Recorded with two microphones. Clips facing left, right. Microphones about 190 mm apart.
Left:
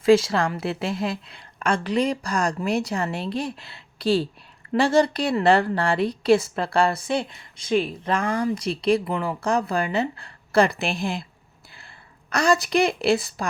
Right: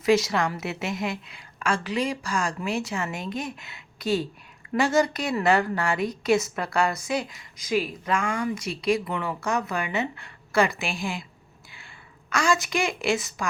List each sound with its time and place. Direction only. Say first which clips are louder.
0.0 s a woman's voice: left 4 dB; 30° left (ahead or behind)
12.3 s a woman's voice: left 4 dB; 35° left (ahead or behind)